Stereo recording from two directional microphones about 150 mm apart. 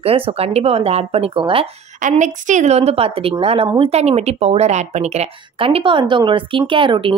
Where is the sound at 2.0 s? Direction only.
55° right (ahead or behind).